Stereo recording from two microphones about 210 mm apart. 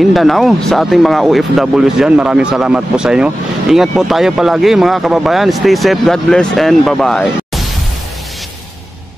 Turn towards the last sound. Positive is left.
turn(degrees=0)  # may be behind; listen again after turning